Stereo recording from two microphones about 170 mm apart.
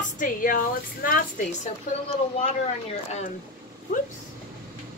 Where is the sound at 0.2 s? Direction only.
55° left (ahead or behind).